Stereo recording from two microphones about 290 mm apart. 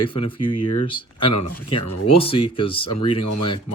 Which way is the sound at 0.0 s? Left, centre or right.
Centre.